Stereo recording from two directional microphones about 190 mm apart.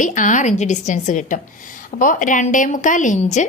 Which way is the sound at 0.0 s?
40° left (ahead or behind).